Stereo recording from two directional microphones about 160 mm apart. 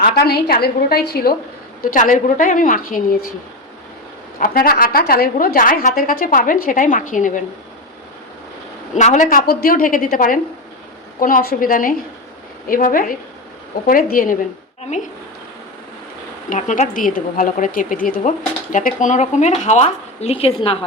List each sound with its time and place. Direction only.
0.0 s a woman's voice: 75° left (ahead or behind)
1.8 s a woman's voice: 60° left (ahead or behind)
4.4 s a woman's voice: 65° left (ahead or behind)
9.0 s speech: 50° left (ahead or behind)
9.5 s a woman's voice: 65° left (ahead or behind)
16.5 s speech: 50° left (ahead or behind)